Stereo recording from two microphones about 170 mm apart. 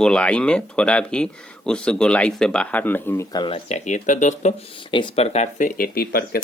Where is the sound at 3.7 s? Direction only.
45° left (ahead or behind).